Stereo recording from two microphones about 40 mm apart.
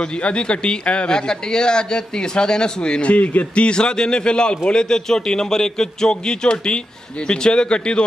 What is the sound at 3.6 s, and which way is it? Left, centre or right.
A man's voice, left.